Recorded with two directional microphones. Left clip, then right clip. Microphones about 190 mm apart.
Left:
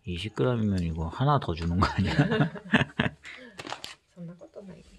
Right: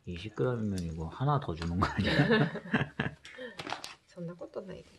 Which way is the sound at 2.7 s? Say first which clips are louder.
Left 10 dB; 45° left (ahead or behind).